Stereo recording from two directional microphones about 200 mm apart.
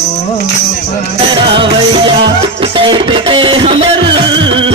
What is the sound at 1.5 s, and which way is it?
Music, 25° right (ahead or behind).